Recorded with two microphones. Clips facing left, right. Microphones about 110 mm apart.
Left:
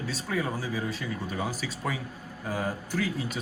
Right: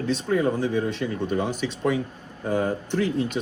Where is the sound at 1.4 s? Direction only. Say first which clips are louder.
Right 7 dB; 5° left (ahead or behind).